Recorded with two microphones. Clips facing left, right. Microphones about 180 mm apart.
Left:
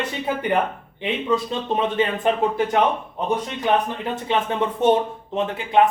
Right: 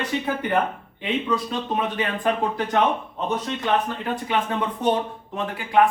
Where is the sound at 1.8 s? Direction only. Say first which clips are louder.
Left 7 dB; 25° left (ahead or behind).